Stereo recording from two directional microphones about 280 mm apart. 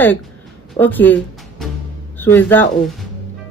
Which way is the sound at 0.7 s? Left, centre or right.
Centre.